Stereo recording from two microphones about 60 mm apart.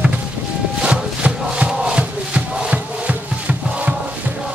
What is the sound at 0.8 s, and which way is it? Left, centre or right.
Music, centre.